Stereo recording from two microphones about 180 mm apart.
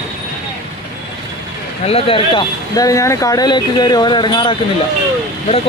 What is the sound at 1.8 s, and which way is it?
Speech, 35° left (ahead or behind).